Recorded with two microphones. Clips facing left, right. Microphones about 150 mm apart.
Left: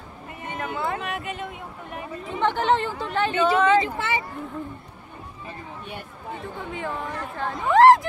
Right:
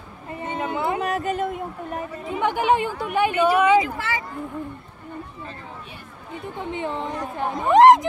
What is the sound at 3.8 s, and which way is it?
Speech, 25° left (ahead or behind).